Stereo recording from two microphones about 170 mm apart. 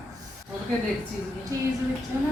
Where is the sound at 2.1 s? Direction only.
15° right (ahead or behind).